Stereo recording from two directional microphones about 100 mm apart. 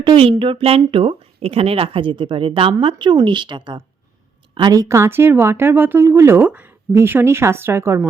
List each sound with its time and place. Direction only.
0.0 s a woman's voice: 60° right (ahead or behind); by 7.9 s 25° right (ahead or behind)